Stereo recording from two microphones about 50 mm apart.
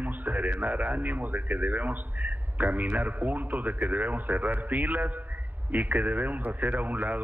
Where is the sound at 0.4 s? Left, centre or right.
Right.